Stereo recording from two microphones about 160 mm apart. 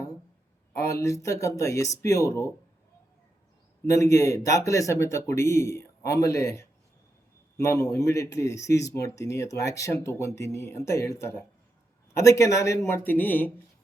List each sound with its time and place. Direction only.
0.8 s a man's voice: 20° left (ahead or behind)
3.8 s a man's voice: 20° left (ahead or behind)